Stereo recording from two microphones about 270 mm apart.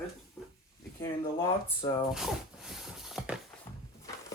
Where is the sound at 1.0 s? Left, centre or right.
Centre.